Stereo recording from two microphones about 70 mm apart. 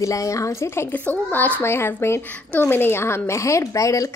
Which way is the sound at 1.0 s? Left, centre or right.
Left.